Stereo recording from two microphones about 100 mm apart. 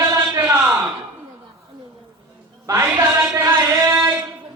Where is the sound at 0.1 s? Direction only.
35° right (ahead or behind).